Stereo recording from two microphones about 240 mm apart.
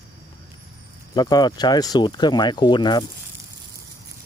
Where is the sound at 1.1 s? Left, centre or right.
Centre.